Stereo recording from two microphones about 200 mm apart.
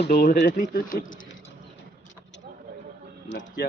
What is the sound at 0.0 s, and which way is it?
Speech, 50° left (ahead or behind).